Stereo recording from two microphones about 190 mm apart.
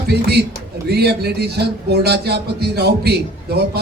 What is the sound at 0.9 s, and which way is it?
A man's voice, 60° right (ahead or behind).